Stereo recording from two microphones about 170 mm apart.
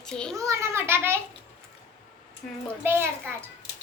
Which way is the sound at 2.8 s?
15° right (ahead or behind).